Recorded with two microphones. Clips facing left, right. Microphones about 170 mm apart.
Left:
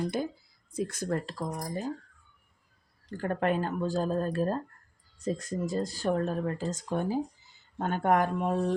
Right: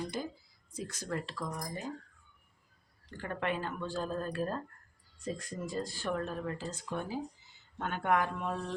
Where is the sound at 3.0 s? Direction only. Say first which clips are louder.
Left 7 dB; 40° left (ahead or behind).